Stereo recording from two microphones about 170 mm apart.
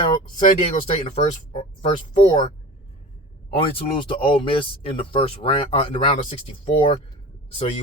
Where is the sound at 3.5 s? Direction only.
30° left (ahead or behind).